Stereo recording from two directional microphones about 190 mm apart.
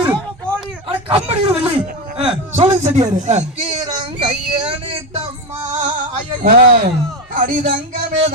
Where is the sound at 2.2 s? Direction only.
30° right (ahead or behind).